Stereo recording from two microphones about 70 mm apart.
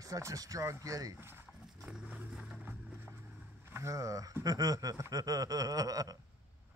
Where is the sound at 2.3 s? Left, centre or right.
Centre.